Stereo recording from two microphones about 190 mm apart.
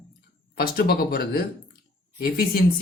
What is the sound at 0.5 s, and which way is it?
Speech, 50° left (ahead or behind).